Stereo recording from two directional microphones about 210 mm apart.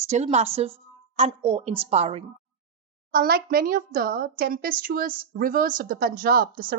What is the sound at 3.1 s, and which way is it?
A woman's voice, 45° right (ahead or behind).